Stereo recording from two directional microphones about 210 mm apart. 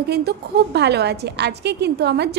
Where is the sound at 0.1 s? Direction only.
50° right (ahead or behind).